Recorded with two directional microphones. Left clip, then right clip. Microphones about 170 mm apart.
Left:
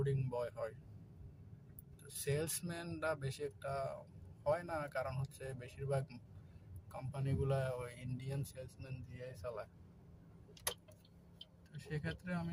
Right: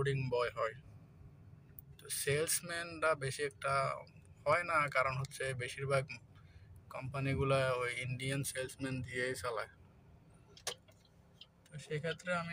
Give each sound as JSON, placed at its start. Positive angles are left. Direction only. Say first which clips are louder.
{"t": 0.0, "sound": "speech", "louder": "right 5 dB", "side_deg": 15}
{"t": 2.2, "sound": "speech", "louder": "right 5 dB", "side_deg": 15}
{"t": 12.2, "sound": "speech", "louder": "right 9 dB", "side_deg": 25}